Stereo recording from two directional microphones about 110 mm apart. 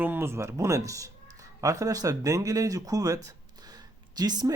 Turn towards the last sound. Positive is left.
turn(degrees=-40)  # may be behind; listen again after turning